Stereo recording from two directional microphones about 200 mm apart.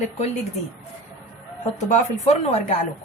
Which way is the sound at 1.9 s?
35° left (ahead or behind).